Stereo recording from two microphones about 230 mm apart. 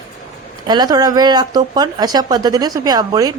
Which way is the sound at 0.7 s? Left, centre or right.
Centre.